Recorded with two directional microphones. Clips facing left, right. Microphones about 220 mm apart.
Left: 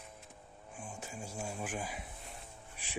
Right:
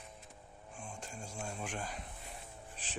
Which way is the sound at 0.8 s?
5° left (ahead or behind).